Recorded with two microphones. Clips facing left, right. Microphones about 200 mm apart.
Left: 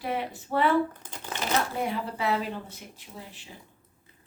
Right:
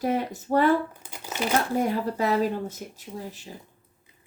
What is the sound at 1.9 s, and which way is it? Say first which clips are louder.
Speech: right 4 dB; 40° right (ahead or behind).